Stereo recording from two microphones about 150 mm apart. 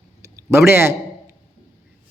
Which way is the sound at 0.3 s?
15° right (ahead or behind).